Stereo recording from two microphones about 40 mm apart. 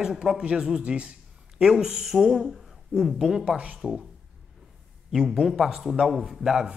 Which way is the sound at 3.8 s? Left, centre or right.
Centre.